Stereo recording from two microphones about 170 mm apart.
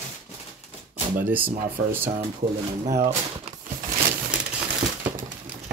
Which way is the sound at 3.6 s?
50° right (ahead or behind).